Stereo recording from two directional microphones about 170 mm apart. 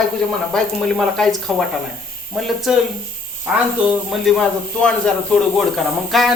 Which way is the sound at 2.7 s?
5° right (ahead or behind).